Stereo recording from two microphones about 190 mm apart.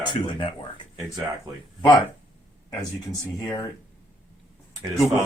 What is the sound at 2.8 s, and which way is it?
Speech, 20° left (ahead or behind).